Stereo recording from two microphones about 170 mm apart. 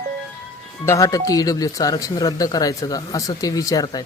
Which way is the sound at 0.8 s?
20° left (ahead or behind).